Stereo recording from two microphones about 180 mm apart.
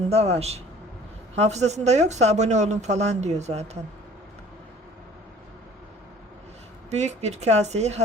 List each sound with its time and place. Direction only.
0.1 s a woman's voice: 35° right (ahead or behind)
6.9 s a woman's voice: 40° right (ahead or behind)